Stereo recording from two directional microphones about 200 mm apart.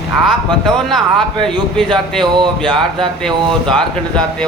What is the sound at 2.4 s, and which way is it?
Speech, 25° right (ahead or behind).